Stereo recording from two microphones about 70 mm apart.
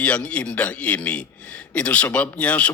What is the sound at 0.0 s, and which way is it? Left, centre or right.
A man's voice, centre.